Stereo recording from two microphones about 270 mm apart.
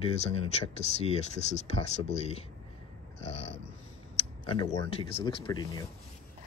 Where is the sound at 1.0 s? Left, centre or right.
Left.